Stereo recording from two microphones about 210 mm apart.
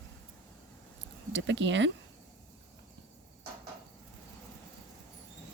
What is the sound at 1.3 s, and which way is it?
Speech, 60° right (ahead or behind).